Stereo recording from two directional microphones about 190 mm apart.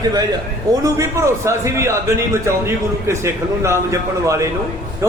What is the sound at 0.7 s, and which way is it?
Speech, 20° right (ahead or behind).